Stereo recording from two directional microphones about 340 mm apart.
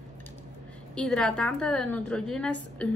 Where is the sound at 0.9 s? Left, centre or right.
Centre.